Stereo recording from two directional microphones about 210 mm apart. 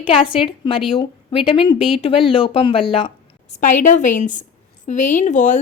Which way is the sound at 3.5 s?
35° left (ahead or behind).